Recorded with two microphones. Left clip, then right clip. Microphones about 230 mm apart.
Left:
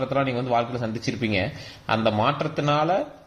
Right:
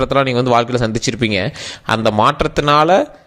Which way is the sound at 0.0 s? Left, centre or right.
Right.